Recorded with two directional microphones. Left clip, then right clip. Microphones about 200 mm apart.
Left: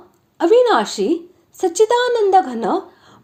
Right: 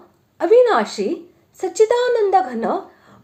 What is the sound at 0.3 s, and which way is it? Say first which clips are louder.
A woman's voice: even; 30° left (ahead or behind).